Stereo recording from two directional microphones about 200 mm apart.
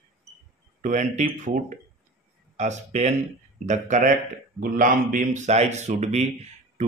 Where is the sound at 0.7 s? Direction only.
40° right (ahead or behind).